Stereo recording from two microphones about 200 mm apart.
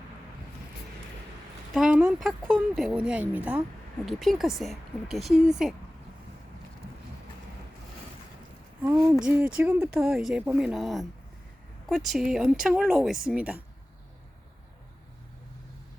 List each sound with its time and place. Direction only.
1.7 s speech: 5° right (ahead or behind)
8.8 s a sound: 15° right (ahead or behind)
9.1 s speech: 5° right (ahead or behind)